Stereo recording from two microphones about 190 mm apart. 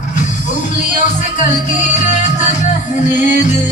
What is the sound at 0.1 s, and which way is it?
Music, 40° left (ahead or behind).